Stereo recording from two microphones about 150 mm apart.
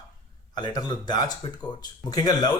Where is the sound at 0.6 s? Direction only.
30° left (ahead or behind).